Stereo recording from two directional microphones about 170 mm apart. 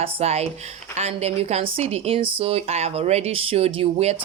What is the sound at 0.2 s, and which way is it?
A woman's voice, 40° right (ahead or behind).